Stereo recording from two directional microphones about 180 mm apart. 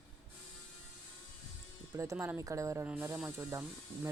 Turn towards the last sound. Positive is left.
turn(degrees=-10)  # may be behind; listen again after turning